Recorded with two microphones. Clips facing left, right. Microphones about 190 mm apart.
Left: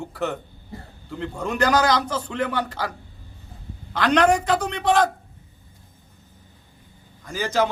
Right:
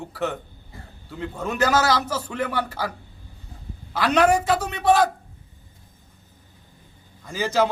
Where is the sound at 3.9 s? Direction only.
5° right (ahead or behind).